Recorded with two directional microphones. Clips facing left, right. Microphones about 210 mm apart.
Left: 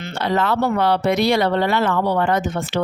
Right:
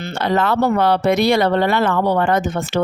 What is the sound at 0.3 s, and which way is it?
A woman's voice, 50° right (ahead or behind).